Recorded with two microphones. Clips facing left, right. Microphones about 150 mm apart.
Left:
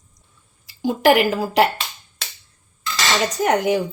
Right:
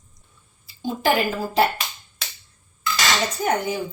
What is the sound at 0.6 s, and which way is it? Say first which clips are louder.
A woman's voice: left 6 dB; 90° left.